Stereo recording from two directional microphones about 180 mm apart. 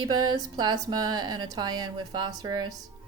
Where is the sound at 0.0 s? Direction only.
25° right (ahead or behind).